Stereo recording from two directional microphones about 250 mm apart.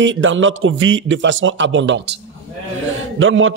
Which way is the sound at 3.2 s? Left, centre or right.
Right.